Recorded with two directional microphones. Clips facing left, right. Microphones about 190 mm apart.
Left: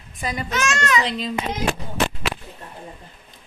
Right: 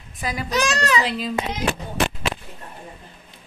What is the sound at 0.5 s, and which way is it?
Speech, 35° right (ahead or behind).